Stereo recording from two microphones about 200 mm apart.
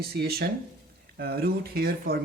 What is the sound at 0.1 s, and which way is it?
Speech, 50° right (ahead or behind).